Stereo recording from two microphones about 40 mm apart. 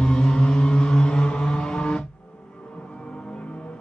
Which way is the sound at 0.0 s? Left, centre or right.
Centre.